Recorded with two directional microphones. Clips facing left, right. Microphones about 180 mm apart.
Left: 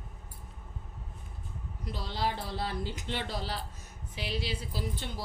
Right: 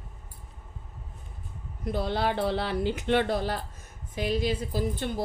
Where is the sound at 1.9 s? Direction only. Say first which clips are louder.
Right 7 dB; 55° right (ahead or behind).